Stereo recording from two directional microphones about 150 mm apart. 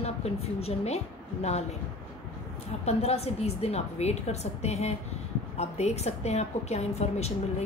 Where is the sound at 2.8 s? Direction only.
45° left (ahead or behind).